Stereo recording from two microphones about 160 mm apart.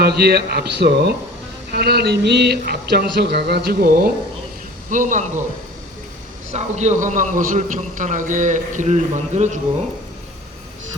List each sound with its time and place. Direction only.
0.0 s speech: 85° right; by 4.1 s 70° right (ahead or behind)
4.9 s a man's voice: 55° right (ahead or behind)
6.5 s a man's voice: 45° right (ahead or behind)